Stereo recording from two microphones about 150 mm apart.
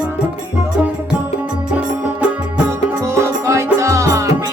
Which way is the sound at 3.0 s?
20° right (ahead or behind).